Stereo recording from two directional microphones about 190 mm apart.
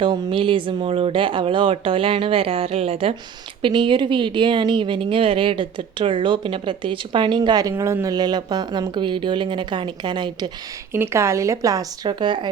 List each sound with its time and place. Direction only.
0.0 s a woman's voice: 25° right (ahead or behind)